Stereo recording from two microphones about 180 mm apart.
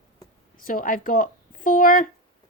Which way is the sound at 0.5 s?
50° left (ahead or behind).